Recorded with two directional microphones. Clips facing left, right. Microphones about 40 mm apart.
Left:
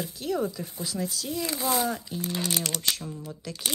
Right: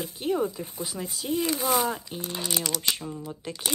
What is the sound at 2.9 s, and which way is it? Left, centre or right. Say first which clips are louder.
Speech: right 2 dB; right.